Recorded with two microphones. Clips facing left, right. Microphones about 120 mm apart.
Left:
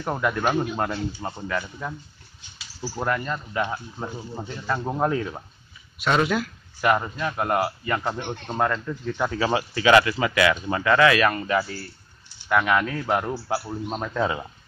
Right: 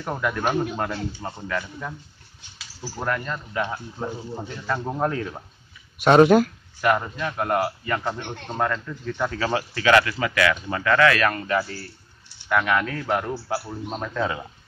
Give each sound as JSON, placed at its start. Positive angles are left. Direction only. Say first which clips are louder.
{"t": 0.0, "sound": "a man's voice", "louder": "left 1 dB", "side_deg": 5}
{"t": 3.0, "sound": "a man's voice", "louder": "left 1 dB", "side_deg": 10}
{"t": 5.9, "sound": "speech", "louder": "right 8 dB", "side_deg": -45}
{"t": 6.8, "sound": "a man's voice", "louder": "even", "side_deg": 5}